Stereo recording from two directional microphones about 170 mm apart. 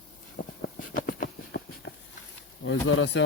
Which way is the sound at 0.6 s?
55° left (ahead or behind).